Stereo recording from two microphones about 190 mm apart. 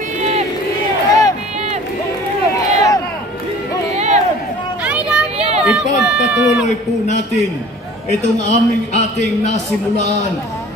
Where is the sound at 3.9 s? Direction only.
35° right (ahead or behind).